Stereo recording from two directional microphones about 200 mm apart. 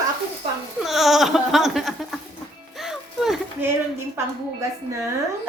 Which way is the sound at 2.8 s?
Centre (ahead or behind).